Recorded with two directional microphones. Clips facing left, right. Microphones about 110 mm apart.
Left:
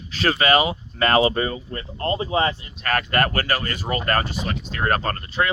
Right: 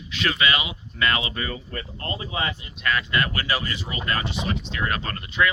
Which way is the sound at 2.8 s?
50° left (ahead or behind).